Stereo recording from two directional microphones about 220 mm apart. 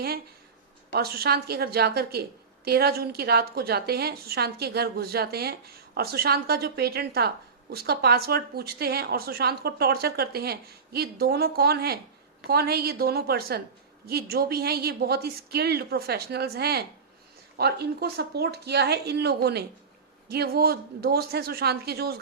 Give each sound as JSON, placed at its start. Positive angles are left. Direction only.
{"t": 0.9, "sound": "a woman's voice", "side_deg": -45}